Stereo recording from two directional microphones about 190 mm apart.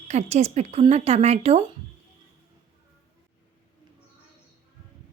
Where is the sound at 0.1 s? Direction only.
35° right (ahead or behind).